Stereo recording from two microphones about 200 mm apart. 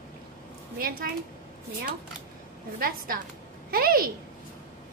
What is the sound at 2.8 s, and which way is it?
Speech, 45° right (ahead or behind).